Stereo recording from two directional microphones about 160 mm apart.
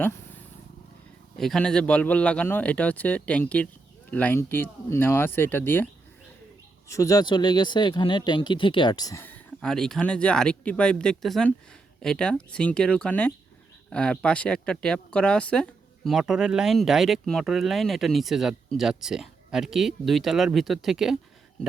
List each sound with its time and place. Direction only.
1.4 s speech: 5° left (ahead or behind)